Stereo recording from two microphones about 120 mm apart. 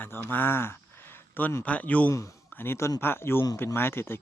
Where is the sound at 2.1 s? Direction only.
25° left (ahead or behind).